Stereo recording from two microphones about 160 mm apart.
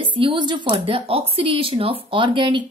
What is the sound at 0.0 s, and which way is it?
A woman's voice, 30° right (ahead or behind).